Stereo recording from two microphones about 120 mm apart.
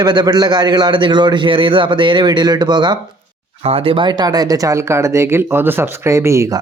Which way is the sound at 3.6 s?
55° right (ahead or behind).